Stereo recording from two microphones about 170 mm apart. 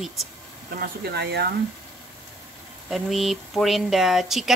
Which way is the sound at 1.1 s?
75° right (ahead or behind).